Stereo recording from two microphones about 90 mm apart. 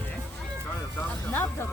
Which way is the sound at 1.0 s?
25° left (ahead or behind).